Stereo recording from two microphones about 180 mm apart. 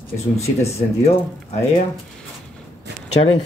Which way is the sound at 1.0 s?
35° left (ahead or behind).